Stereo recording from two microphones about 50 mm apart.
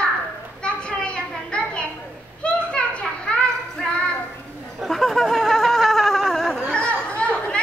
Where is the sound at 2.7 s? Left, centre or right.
Centre.